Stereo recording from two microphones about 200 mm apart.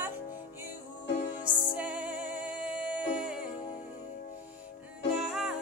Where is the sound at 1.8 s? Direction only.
5° right (ahead or behind).